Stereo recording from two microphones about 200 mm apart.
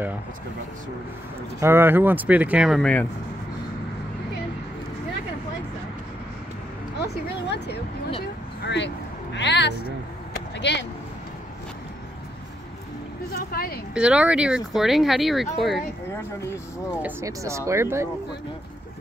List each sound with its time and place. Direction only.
1.6 s speech: 10° right (ahead or behind); by 3.1 s 5° left (ahead or behind)
7.0 s a woman's voice: 60° left (ahead or behind)
13.3 s speech: 50° left (ahead or behind)
13.9 s speech: 5° right (ahead or behind)
17.0 s speech: 15° right (ahead or behind)